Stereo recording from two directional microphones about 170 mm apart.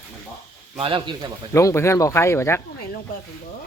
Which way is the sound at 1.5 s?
15° left (ahead or behind).